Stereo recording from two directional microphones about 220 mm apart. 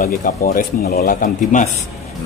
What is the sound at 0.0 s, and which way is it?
Speech, 40° left (ahead or behind).